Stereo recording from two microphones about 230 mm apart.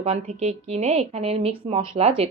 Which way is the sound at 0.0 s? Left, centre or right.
Right.